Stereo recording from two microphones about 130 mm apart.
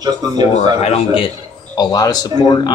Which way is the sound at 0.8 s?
55° left (ahead or behind).